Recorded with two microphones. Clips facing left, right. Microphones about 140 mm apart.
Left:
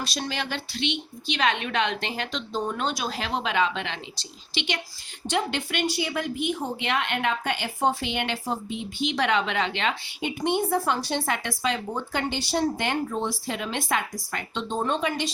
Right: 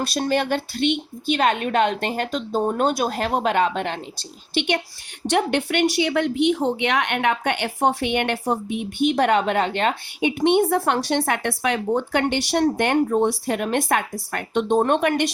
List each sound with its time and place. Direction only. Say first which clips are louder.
0.0 s a woman's voice: right 9 dB; 55° right (ahead or behind)
4.5 s a woman's voice: right 8 dB; 60° right (ahead or behind)
12.6 s speech: right 7 dB; 55° right (ahead or behind)